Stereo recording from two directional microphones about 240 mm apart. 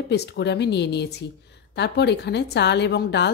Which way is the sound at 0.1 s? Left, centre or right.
Left.